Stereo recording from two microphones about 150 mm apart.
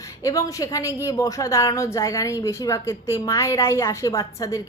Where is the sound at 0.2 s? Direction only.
20° left (ahead or behind).